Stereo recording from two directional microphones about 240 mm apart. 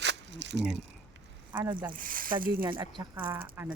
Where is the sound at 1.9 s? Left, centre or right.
Right.